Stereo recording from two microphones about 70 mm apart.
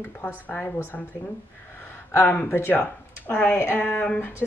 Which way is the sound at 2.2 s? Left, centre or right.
Left.